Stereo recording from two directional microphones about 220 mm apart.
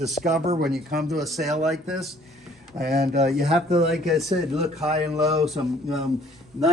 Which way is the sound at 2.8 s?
45° right (ahead or behind).